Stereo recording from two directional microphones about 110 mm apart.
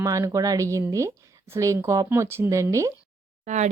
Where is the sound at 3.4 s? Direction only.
90° right.